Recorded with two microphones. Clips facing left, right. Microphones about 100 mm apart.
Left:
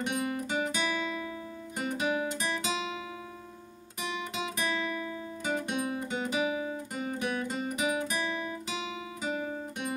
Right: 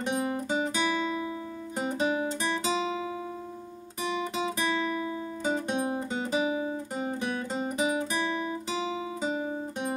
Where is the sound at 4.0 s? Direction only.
30° right (ahead or behind).